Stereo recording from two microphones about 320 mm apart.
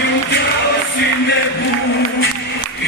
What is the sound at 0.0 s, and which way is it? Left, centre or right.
Music, left.